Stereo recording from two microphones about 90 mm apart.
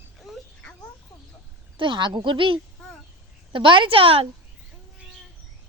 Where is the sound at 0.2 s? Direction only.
Centre (ahead or behind).